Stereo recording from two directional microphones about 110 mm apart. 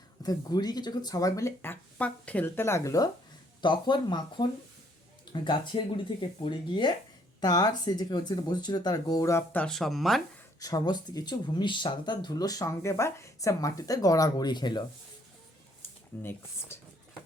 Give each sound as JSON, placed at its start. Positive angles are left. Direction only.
{"t": 0.2, "sound": "speech", "side_deg": 35}
{"t": 3.6, "sound": "speech", "side_deg": 45}
{"t": 7.4, "sound": "speech", "side_deg": 40}
{"t": 9.5, "sound": "speech", "side_deg": 15}
{"t": 9.7, "sound": "speech", "side_deg": 0}
{"t": 10.6, "sound": "speech", "side_deg": 35}
{"t": 15.8, "sound": "speech", "side_deg": 20}